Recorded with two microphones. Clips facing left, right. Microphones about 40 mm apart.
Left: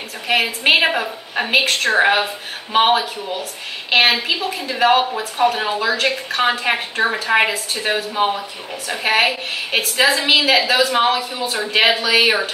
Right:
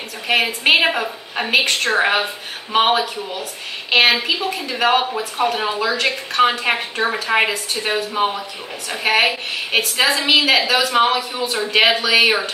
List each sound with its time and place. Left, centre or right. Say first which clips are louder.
0.3 s a woman's voice: even; centre